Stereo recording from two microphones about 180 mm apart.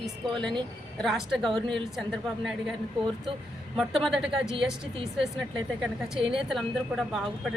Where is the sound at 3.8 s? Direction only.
Centre (ahead or behind).